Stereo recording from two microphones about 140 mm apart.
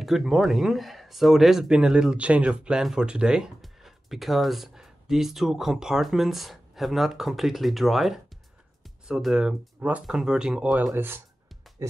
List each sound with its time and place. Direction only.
0.0 s speech: centre (ahead or behind)
10.9 s speech: 15° right (ahead or behind)
11.8 s music: 20° right (ahead or behind)